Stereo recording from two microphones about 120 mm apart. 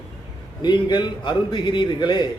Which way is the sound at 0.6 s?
40° left (ahead or behind).